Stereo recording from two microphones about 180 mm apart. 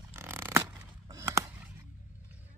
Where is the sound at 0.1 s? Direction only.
15° right (ahead or behind).